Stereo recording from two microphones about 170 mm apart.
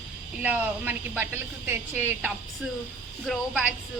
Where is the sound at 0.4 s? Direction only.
10° right (ahead or behind).